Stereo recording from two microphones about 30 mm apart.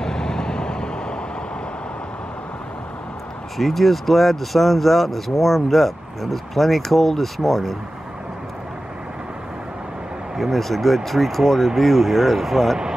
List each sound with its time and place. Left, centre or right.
0.0 s vehicle: left
3.5 s speech: centre
10.3 s speech: centre